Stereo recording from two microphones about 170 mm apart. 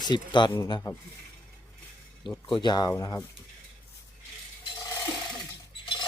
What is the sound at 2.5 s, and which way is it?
Speech, 25° left (ahead or behind).